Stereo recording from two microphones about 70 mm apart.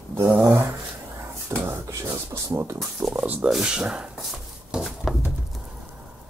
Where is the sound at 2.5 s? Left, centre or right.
Right.